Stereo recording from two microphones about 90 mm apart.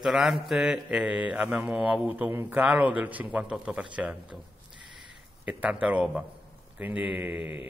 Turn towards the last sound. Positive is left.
turn(degrees=-20)  # may be behind; listen again after turning